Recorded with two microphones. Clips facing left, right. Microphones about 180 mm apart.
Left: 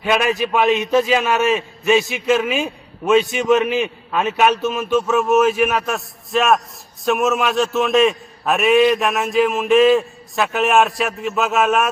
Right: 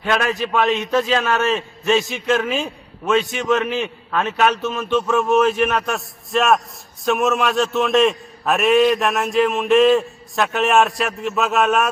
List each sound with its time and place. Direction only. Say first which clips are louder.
0.0 s a man's voice: left 2 dB; 10° left (ahead or behind)